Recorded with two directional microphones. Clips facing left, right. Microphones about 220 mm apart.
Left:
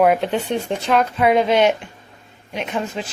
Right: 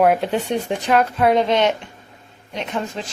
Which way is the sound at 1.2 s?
5° left (ahead or behind).